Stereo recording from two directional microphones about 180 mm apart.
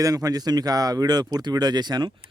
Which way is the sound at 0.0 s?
20° right (ahead or behind).